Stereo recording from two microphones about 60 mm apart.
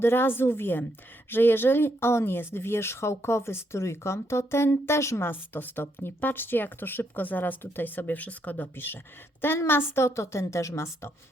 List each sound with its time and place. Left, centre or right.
0.0 s speech: left